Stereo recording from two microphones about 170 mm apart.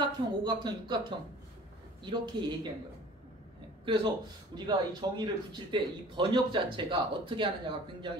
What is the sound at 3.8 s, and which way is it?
A man's voice, 30° right (ahead or behind).